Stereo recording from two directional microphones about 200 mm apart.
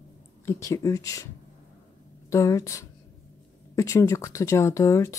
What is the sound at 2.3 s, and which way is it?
Speech, 15° left (ahead or behind).